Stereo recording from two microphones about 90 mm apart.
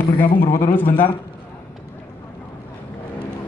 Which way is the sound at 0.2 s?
20° left (ahead or behind).